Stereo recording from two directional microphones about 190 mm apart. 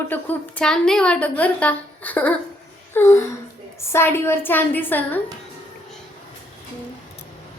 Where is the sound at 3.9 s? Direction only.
10° left (ahead or behind).